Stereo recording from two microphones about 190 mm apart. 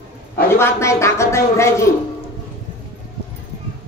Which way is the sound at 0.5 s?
15° left (ahead or behind).